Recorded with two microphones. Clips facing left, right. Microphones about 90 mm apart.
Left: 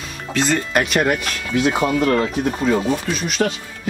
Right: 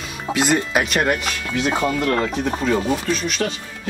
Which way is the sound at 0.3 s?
10° right (ahead or behind).